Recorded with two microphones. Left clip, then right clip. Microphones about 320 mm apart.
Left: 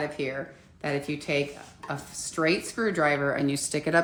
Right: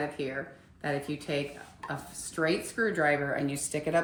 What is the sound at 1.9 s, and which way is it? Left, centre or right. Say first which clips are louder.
Speech: left 5 dB; centre.